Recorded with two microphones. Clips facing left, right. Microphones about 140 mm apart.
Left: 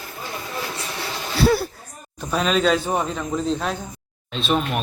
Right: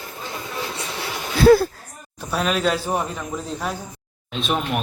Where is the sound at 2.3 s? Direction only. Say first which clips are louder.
Left 2 dB; 5° right (ahead or behind).